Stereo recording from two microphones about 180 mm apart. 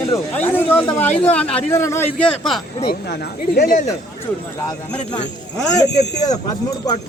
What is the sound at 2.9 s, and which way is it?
Speech, 60° left (ahead or behind).